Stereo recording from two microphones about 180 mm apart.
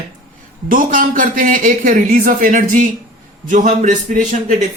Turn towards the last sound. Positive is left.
turn(degrees=-45)  # may be behind; listen again after turning